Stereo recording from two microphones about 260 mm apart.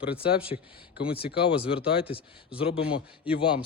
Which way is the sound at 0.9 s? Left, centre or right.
Left.